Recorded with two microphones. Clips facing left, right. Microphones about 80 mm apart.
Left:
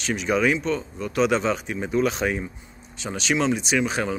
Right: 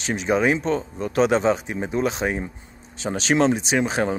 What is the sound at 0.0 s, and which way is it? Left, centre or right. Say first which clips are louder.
Speech: right 1 dB; right.